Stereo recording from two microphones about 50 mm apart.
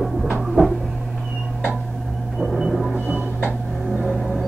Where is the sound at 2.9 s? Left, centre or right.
Right.